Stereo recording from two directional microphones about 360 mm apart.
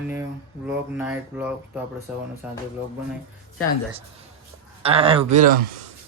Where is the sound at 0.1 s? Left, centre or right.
Centre.